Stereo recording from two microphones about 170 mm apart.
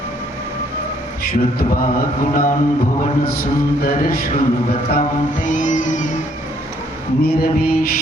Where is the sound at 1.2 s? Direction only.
60° left (ahead or behind).